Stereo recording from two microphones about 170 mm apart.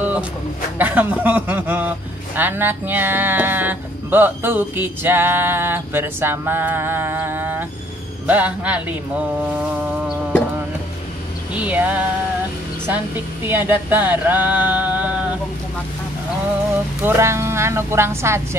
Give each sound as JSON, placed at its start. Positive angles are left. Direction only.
{"t": 0.7, "sound": "a man's voice", "side_deg": -10}
{"t": 11.5, "sound": "speech", "side_deg": -10}
{"t": 17.0, "sound": "speech", "side_deg": -15}